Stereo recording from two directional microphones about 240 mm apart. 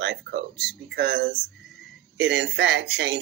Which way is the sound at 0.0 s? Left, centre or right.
Right.